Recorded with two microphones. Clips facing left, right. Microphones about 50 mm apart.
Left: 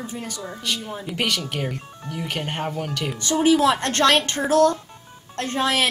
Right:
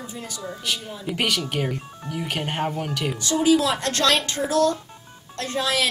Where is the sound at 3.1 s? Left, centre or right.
Left.